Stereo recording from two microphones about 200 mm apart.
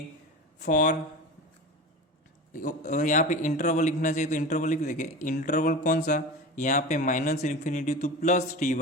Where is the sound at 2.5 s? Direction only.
40° left (ahead or behind).